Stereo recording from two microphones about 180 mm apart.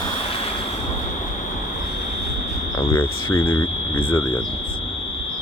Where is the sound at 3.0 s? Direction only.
10° left (ahead or behind).